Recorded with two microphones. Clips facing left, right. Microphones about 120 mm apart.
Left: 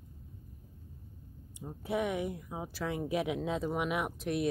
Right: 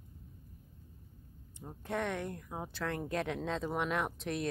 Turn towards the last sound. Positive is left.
turn(degrees=5)  # may be behind; listen again after turning